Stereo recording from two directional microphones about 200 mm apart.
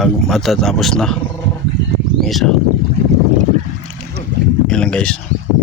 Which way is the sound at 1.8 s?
65° right (ahead or behind).